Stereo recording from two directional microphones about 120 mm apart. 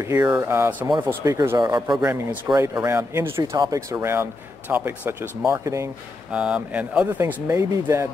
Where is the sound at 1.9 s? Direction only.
10° right (ahead or behind).